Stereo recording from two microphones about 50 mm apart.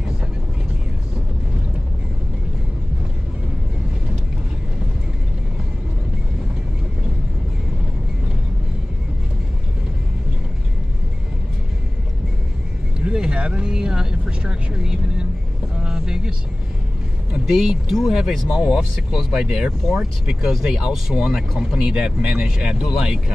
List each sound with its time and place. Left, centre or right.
13.0 s vehicle: centre
15.8 s music: centre
17.5 s speech: centre
21.1 s speech: centre